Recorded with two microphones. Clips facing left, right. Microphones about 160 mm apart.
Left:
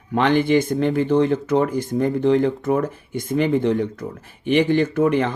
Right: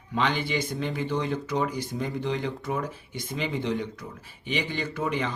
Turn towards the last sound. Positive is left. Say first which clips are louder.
# left 10 dB
turn(degrees=55)  # may be behind; listen again after turning